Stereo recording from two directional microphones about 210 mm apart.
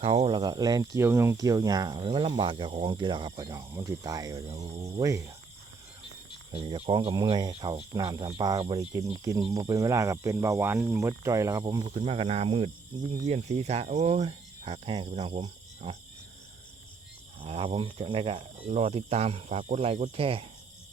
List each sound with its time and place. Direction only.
0.0 s speech: 30° right (ahead or behind)
6.5 s speech: 25° right (ahead or behind)
17.4 s speech: 25° right (ahead or behind)